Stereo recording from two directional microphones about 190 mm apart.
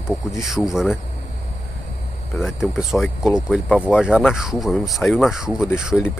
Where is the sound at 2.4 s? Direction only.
Centre (ahead or behind).